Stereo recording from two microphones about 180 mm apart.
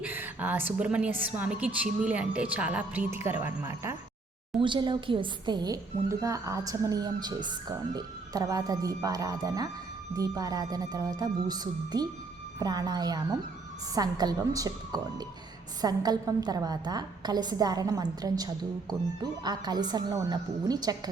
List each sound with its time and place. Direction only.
0.0 s a woman's voice: 10° right (ahead or behind)
4.6 s a woman's voice: 25° right (ahead or behind)